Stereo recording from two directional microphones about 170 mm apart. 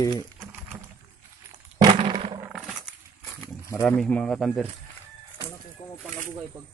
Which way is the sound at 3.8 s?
5° left (ahead or behind).